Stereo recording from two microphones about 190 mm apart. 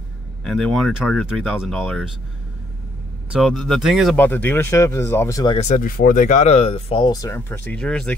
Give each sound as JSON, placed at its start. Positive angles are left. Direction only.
{"t": 0.4, "sound": "speech", "side_deg": 0}
{"t": 3.3, "sound": "speech", "side_deg": 0}
{"t": 4.2, "sound": "speech", "side_deg": 10}
{"t": 5.6, "sound": "speech", "side_deg": 40}